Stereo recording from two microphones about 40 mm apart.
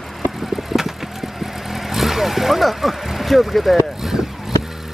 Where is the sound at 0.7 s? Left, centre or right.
Centre.